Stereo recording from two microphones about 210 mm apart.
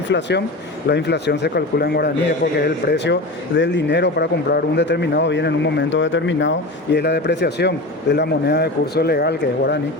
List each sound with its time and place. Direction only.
0.1 s speech: 55° left (ahead or behind)